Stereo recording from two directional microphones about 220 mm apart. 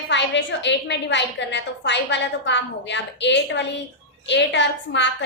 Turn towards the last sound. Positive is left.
turn(degrees=55)  # may be behind; listen again after turning